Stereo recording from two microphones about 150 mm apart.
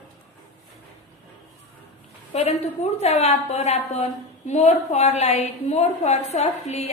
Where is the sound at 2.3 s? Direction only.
45° left (ahead or behind).